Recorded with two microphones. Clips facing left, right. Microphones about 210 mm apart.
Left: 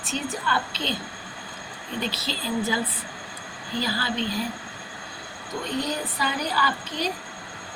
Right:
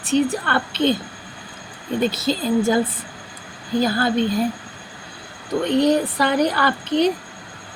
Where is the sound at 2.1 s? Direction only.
50° right (ahead or behind).